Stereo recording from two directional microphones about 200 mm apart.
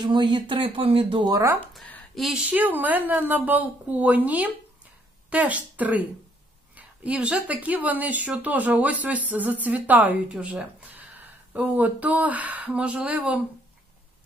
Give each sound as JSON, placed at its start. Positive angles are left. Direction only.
{"t": 0.0, "sound": "speech", "side_deg": -25}
{"t": 1.7, "sound": "speech", "side_deg": 5}